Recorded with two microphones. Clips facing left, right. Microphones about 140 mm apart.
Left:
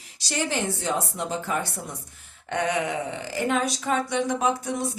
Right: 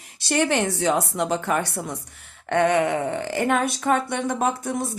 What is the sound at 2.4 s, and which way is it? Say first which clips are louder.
Speech: right 6 dB; 60° right (ahead or behind).